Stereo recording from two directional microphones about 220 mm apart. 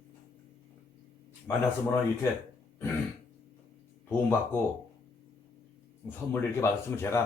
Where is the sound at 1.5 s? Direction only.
10° left (ahead or behind).